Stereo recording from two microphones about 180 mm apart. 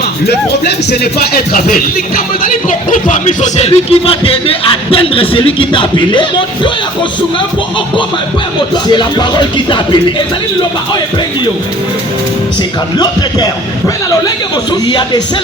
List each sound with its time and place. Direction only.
0.3 s speech: 65° left (ahead or behind); by 6.7 s 25° left (ahead or behind)
8.7 s music: 25° left (ahead or behind)
13.0 s music: 20° left (ahead or behind)